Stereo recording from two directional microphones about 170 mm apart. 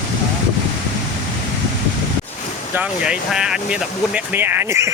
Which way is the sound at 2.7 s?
5° right (ahead or behind).